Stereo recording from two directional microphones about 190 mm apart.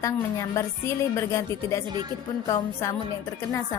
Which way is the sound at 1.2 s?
15° left (ahead or behind).